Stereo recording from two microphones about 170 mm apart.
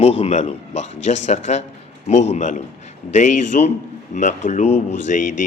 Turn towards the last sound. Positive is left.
turn(degrees=45)  # may be behind; listen again after turning